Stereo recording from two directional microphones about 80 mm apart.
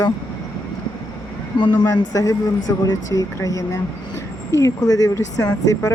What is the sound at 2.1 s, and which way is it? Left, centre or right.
Speech, left.